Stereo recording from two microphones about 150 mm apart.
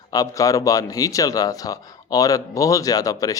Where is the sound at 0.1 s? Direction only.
25° left (ahead or behind).